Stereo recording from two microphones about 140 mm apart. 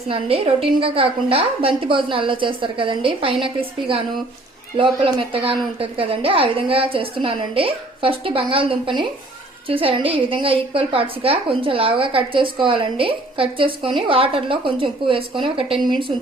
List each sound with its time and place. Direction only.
0.1 s a woman's voice: 40° right (ahead or behind)